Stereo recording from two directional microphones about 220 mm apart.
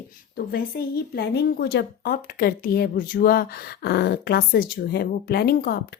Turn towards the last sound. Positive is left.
turn(degrees=45)  # may be behind; listen again after turning